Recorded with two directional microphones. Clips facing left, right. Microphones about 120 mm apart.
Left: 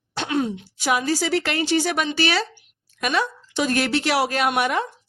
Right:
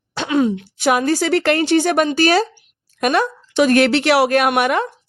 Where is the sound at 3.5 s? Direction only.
70° right (ahead or behind).